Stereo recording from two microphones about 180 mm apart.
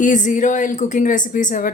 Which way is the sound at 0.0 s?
45° left (ahead or behind).